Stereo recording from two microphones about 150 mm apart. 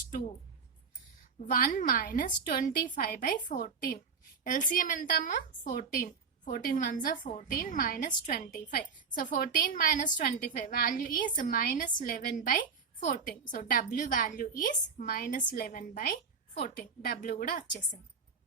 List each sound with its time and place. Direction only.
1.5 s a woman's voice: 65° left (ahead or behind)
16.6 s a woman's voice: 90° left